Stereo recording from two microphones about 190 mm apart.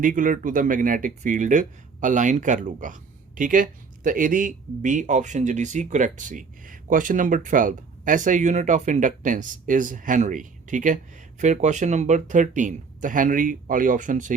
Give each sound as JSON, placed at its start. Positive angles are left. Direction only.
{"t": 0.0, "sound": "speech", "side_deg": -45}